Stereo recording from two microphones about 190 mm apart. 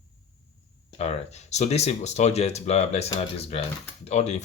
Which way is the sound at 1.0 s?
35° left (ahead or behind).